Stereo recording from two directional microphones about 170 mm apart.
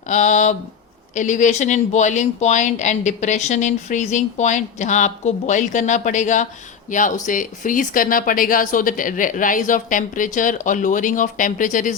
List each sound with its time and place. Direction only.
0.1 s speech: 45° left (ahead or behind)